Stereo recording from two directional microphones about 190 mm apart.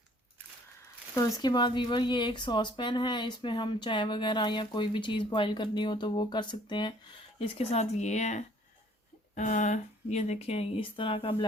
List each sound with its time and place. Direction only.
1.1 s speech: 20° left (ahead or behind)